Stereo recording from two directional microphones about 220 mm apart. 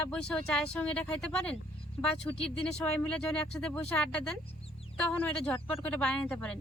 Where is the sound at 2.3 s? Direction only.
15° left (ahead or behind).